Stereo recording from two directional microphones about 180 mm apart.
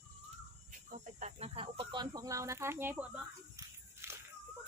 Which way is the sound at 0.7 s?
45° right (ahead or behind).